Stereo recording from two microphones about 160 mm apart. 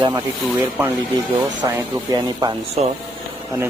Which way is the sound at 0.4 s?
10° right (ahead or behind).